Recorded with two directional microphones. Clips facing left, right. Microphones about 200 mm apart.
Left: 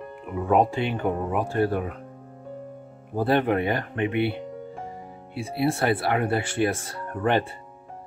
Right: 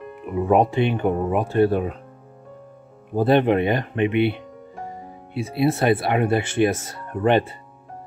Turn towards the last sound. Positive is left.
turn(degrees=-20)  # may be behind; listen again after turning